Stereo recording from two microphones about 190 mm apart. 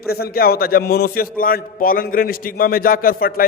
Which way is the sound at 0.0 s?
55° left (ahead or behind).